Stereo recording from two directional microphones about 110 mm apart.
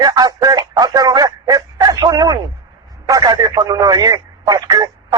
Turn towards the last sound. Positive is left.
turn(degrees=-35)  # may be behind; listen again after turning